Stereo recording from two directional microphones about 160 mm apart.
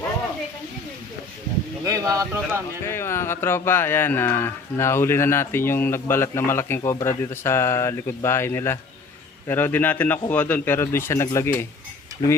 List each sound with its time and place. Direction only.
1.8 s speech: 20° right (ahead or behind)
2.8 s speech: 15° left (ahead or behind)
12.2 s speech: 25° left (ahead or behind)